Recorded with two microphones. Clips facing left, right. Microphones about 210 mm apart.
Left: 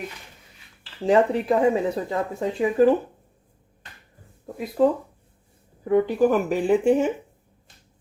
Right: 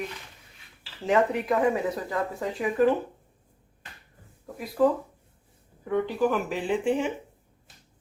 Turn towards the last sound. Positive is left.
turn(degrees=45)  # may be behind; listen again after turning